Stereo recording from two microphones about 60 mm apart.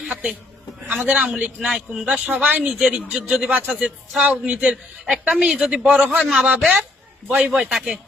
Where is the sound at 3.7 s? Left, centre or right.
Centre.